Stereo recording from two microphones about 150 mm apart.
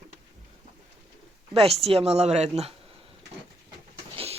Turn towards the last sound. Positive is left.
turn(degrees=-40)  # may be behind; listen again after turning